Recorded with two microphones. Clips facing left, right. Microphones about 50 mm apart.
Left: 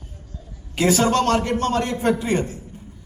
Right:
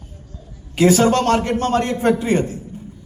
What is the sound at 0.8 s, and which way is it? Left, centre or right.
A man's voice, right.